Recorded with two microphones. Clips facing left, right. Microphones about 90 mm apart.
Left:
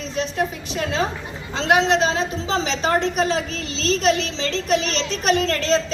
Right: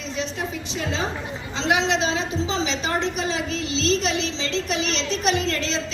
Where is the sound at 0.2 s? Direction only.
50° left (ahead or behind).